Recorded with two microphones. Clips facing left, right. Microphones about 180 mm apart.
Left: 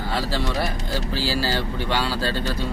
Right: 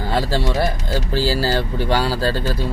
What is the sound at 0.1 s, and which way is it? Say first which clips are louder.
Speech: right 5 dB; 45° right (ahead or behind).